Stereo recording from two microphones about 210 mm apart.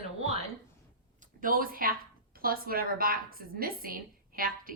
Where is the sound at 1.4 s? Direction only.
40° right (ahead or behind).